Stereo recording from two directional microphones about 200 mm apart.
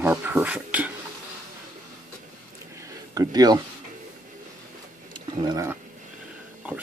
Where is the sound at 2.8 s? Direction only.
20° right (ahead or behind).